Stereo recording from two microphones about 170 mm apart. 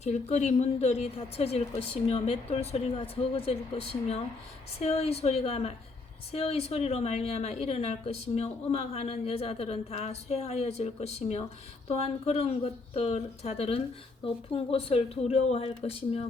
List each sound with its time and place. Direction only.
0.0 s speech: 40° left (ahead or behind)